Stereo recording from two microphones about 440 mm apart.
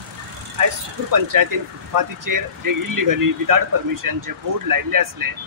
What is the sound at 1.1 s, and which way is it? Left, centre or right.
Speech, right.